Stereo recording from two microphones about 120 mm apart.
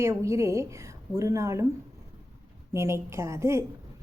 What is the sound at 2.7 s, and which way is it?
Speech, 25° right (ahead or behind).